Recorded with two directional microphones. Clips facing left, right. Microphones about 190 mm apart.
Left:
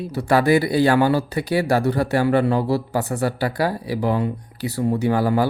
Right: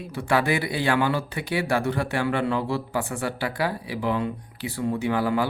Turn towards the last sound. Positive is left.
turn(degrees=40)  # may be behind; listen again after turning